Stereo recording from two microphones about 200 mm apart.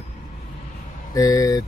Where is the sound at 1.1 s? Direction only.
15° left (ahead or behind).